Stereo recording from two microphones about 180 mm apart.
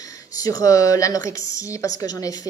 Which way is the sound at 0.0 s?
20° left (ahead or behind).